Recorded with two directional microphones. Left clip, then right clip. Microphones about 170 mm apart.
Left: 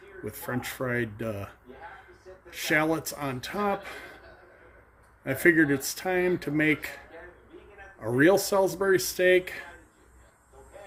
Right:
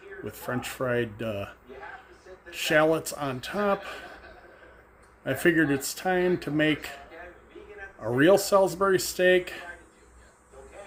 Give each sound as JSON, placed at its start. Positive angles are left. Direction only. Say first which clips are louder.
{"t": 0.3, "sound": "speech", "louder": "right 1 dB", "side_deg": -15}
{"t": 2.5, "sound": "speech", "louder": "right 3 dB", "side_deg": -15}
{"t": 5.2, "sound": "speech", "louder": "left 1 dB", "side_deg": -15}
{"t": 8.0, "sound": "speech", "louder": "right 1 dB", "side_deg": -10}